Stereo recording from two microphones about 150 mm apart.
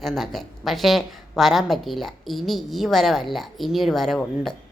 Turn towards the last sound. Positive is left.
turn(degrees=5)  # may be behind; listen again after turning